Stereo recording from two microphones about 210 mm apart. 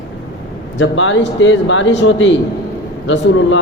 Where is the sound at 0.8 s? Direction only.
65° left (ahead or behind).